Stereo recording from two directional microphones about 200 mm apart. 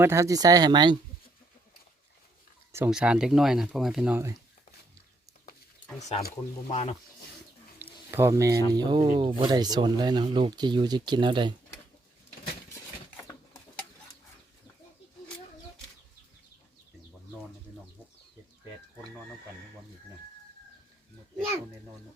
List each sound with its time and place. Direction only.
0.0 s speech: 15° right (ahead or behind)
2.7 s speech: 5° right (ahead or behind)
6.0 s speech: 35° left (ahead or behind)
8.1 s speech: 15° right (ahead or behind)
13.1 s a sound: 15° left (ahead or behind)